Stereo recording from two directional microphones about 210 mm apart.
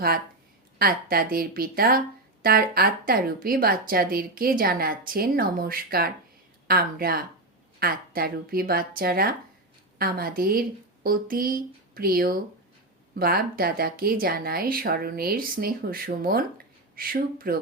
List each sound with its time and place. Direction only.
0.8 s a woman's voice: 45° right (ahead or behind)